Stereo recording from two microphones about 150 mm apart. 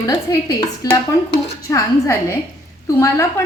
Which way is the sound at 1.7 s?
20° left (ahead or behind).